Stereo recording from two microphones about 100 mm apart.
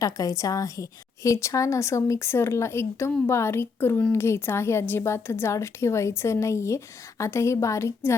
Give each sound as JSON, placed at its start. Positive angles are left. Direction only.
{"t": 0.0, "sound": "a woman's voice", "side_deg": 35}